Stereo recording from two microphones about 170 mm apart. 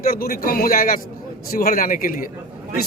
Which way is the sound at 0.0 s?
60° left (ahead or behind).